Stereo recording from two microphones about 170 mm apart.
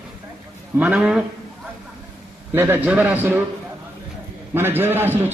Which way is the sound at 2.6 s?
10° right (ahead or behind).